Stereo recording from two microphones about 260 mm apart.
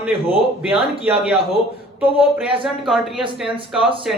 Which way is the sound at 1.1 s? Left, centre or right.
Centre.